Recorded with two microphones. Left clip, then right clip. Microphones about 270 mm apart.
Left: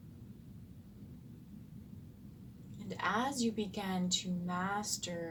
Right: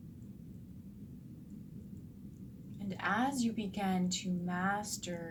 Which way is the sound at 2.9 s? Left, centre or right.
Left.